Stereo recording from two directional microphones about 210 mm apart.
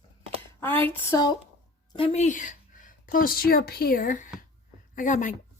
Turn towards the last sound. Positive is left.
turn(degrees=40)  # may be behind; listen again after turning